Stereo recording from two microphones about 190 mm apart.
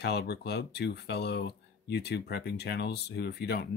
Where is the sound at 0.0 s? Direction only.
60° left (ahead or behind).